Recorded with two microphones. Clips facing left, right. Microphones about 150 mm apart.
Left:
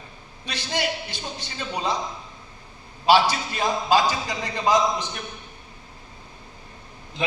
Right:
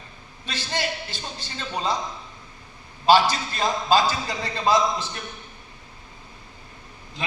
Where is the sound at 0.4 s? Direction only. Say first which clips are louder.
Left 2 dB; 15° left (ahead or behind).